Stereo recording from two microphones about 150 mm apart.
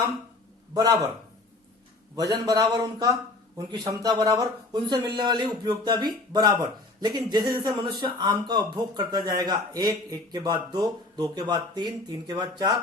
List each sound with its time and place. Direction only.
0.7 s a man's voice: 25° right (ahead or behind)
2.1 s a man's voice: 25° right (ahead or behind)